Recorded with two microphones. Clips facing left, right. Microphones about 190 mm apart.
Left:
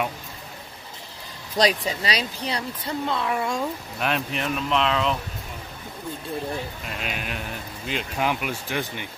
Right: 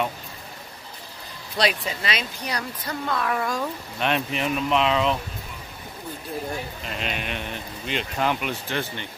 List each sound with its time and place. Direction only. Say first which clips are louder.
1.6 s speech: left 3 dB; 45° left (ahead or behind)
2.0 s speech: left 1 dB; 35° left (ahead or behind)
4.0 s speech: right 2 dB; centre (ahead or behind)
6.9 s speech: right 4 dB; 5° left (ahead or behind)